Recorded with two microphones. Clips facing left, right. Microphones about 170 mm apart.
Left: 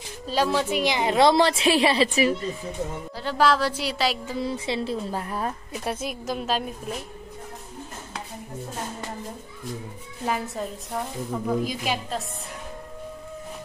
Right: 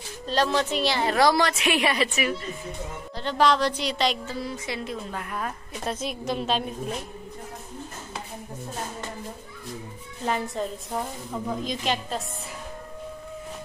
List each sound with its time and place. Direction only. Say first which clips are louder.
0.3 s a woman's voice: left 1 dB; 10° left (ahead or behind); by 2.5 s 30° left (ahead or behind)
3.2 s a woman's voice: even; 5° left (ahead or behind)
4.3 s a woman's voice: left 4 dB; 25° left (ahead or behind)
5.7 s a woman's voice: left 1 dB; 5° left (ahead or behind)
10.2 s a woman's voice: right 1 dB; 5° left (ahead or behind)